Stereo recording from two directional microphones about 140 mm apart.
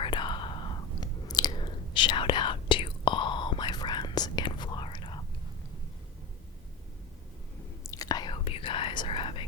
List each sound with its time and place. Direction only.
0.0 s whispering: 35° left (ahead or behind)
7.9 s whispering: 25° left (ahead or behind)